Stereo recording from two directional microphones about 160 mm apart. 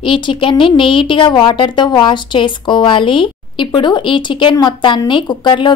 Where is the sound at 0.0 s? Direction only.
30° left (ahead or behind).